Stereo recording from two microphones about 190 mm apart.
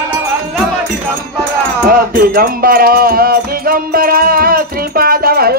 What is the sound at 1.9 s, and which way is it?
Music, 50° right (ahead or behind).